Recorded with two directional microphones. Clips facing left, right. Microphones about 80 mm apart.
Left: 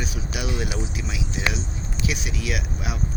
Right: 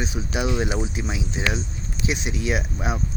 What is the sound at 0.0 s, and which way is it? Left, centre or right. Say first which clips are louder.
Speech: right 4 dB; right.